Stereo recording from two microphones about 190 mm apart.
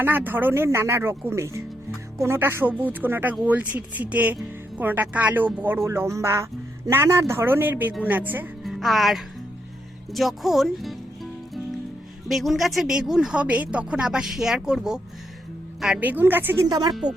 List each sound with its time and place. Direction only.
0.0 s speech: 10° right (ahead or behind)
12.3 s speech: centre (ahead or behind)
16.6 s speech: 20° right (ahead or behind)
16.9 s speech: 5° right (ahead or behind)